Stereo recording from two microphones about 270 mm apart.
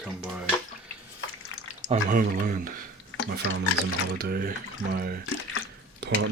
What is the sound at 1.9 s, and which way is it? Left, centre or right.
Speech, right.